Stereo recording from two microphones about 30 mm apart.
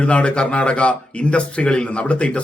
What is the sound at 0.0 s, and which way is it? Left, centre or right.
Speech, left.